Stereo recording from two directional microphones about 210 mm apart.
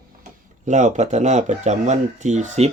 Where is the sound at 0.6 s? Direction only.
35° right (ahead or behind).